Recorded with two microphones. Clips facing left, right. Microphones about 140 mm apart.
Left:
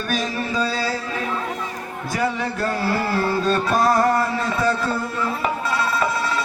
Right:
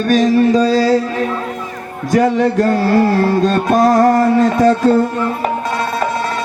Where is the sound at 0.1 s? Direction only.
70° right (ahead or behind).